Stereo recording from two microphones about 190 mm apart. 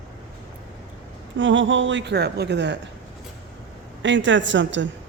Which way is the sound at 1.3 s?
75° right (ahead or behind).